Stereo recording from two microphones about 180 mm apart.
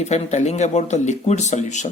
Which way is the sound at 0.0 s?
40° left (ahead or behind).